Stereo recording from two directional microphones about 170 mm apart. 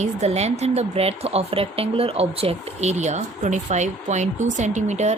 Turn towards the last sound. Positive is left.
turn(degrees=-45)  # may be behind; listen again after turning